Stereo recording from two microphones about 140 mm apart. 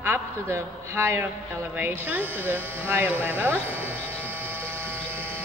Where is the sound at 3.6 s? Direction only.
15° right (ahead or behind).